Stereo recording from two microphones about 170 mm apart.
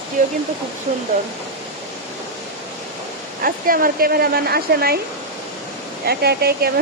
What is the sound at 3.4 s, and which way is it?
Speech, 60° right (ahead or behind).